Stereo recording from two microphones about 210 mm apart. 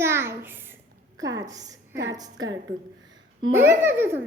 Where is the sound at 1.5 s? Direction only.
15° right (ahead or behind).